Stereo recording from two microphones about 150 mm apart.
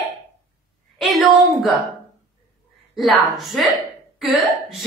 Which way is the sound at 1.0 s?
Centre (ahead or behind).